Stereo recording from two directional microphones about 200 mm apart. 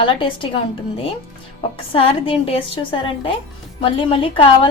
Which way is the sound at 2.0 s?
25° left (ahead or behind).